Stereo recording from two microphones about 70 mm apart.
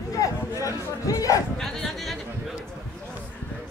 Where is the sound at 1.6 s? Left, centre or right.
Centre.